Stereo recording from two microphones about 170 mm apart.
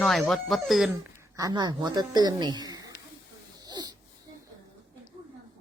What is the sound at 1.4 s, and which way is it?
A woman's voice, 25° right (ahead or behind).